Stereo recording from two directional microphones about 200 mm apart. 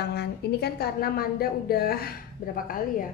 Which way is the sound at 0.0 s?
55° left (ahead or behind).